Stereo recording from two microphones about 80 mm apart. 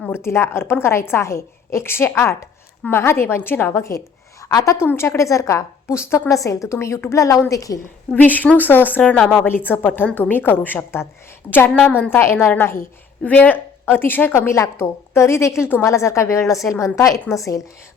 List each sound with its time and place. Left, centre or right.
0.1 s a woman's voice: left
8.1 s a woman's voice: left
12.1 s a woman's voice: left
14.3 s a woman's voice: left